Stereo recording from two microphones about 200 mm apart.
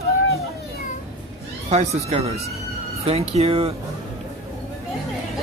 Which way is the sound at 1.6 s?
30° right (ahead or behind).